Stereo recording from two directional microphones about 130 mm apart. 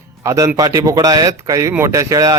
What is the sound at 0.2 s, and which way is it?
Speech, 25° right (ahead or behind).